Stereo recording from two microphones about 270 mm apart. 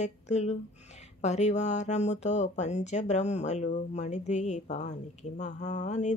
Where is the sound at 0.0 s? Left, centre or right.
Left.